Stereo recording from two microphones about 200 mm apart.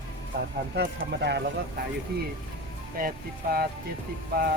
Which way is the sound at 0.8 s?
55° right (ahead or behind).